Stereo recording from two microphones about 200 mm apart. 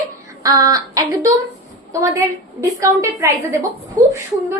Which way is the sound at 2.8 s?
15° right (ahead or behind).